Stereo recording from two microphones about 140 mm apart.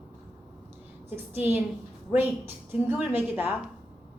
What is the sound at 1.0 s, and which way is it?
A woman's voice, 15° right (ahead or behind).